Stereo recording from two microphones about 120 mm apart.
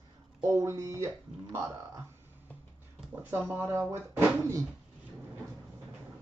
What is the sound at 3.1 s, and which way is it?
Speech, 20° right (ahead or behind).